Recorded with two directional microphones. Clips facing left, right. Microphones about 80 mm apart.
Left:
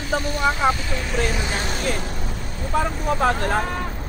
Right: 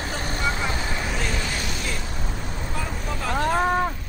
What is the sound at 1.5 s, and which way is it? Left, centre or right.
Vehicle, left.